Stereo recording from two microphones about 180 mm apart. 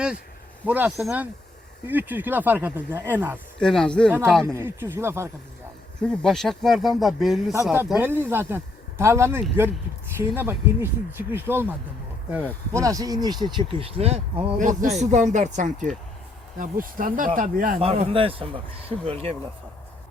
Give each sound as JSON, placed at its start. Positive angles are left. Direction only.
{"t": 0.6, "sound": "speech", "side_deg": -10}
{"t": 3.6, "sound": "speech", "side_deg": 5}
{"t": 4.5, "sound": "speech", "side_deg": -10}
{"t": 6.0, "sound": "speech", "side_deg": 5}
{"t": 12.7, "sound": "speech", "side_deg": -20}
{"t": 17.7, "sound": "speech", "side_deg": -35}